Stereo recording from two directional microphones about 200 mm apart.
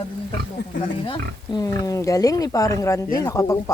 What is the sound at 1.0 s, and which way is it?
Speech, 20° left (ahead or behind).